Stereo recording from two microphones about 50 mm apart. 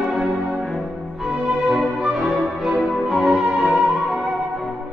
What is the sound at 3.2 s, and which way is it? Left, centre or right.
Music, centre.